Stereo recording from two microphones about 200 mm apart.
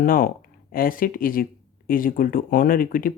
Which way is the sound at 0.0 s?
45° left (ahead or behind).